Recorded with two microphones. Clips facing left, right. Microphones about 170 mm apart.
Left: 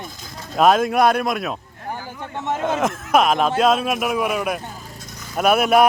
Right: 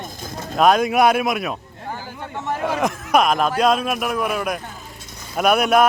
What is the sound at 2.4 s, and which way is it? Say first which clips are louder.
Speech: left 1 dB; 20° left (ahead or behind).